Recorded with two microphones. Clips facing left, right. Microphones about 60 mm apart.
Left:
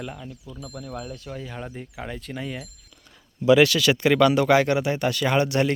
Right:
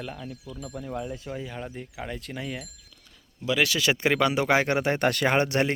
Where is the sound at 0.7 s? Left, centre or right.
Centre.